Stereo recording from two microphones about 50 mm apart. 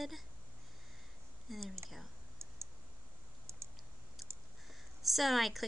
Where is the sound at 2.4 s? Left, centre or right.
Right.